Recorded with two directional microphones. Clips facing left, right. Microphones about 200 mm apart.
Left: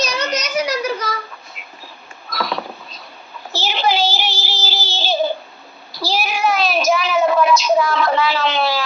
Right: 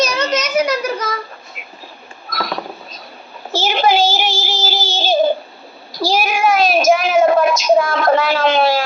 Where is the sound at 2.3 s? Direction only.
45° right (ahead or behind).